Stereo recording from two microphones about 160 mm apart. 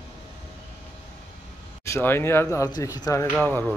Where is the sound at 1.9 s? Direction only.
15° left (ahead or behind).